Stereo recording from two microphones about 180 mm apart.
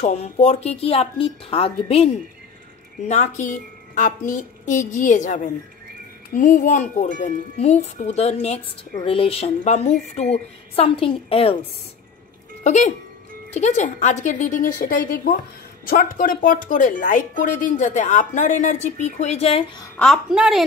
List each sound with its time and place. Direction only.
0.0 s a woman's voice: 35° left (ahead or behind)
3.1 s a woman's voice: 40° left (ahead or behind)
12.6 s a woman's voice: 40° left (ahead or behind)
20.0 s a woman's voice: centre (ahead or behind)